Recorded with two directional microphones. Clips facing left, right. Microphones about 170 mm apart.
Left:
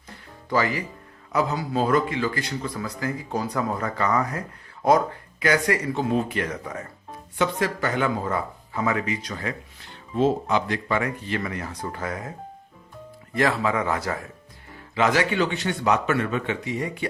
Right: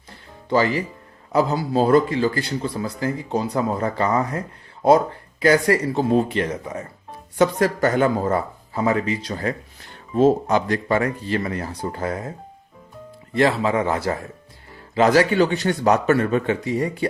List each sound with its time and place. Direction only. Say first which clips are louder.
0.5 s a man's voice: right 5 dB; 30° right (ahead or behind)
7.3 s a man's voice: right 6 dB; 40° right (ahead or behind)
13.3 s a man's voice: right 4 dB; 30° right (ahead or behind)